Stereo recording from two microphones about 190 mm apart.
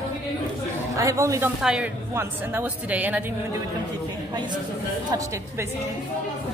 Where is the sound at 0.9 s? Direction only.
15° right (ahead or behind).